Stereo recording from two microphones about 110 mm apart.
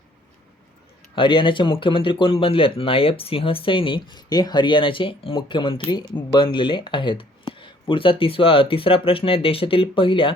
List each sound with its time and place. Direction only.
1.1 s speech: 50° left (ahead or behind)